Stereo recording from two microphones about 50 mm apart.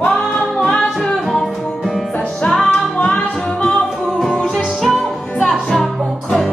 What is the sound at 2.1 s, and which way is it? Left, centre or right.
Music, centre.